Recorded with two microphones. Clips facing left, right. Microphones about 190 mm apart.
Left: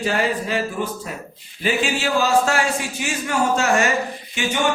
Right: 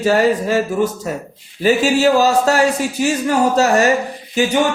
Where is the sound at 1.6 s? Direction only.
40° right (ahead or behind).